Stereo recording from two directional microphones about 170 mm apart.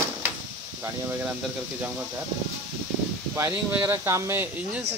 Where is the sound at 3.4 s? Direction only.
10° right (ahead or behind).